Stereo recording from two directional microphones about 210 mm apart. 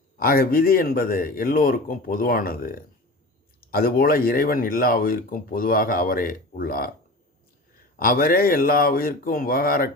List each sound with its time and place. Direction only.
0.2 s speech: 45° left (ahead or behind)
7.9 s speech: 45° left (ahead or behind)